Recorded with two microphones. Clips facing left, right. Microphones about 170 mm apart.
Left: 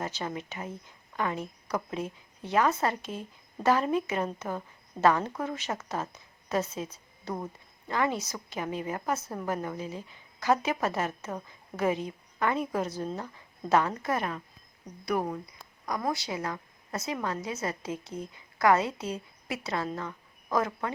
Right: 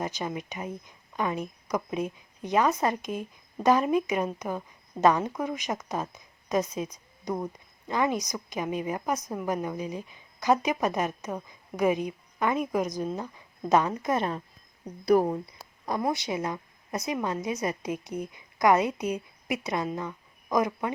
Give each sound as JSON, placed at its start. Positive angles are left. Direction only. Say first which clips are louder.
{"t": 0.0, "sound": "a woman's voice", "louder": "right 2 dB", "side_deg": -15}
{"t": 15.0, "sound": "speech", "louder": "right 8 dB", "side_deg": -30}
{"t": 15.9, "sound": "a woman's voice", "louder": "right 3 dB", "side_deg": -20}